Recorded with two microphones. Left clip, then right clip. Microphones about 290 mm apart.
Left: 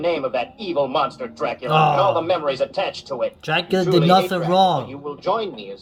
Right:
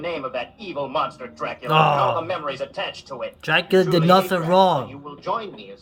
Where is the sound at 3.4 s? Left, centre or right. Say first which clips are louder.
Right 6 dB; centre.